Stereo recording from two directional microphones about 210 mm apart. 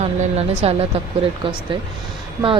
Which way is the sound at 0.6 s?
30° right (ahead or behind).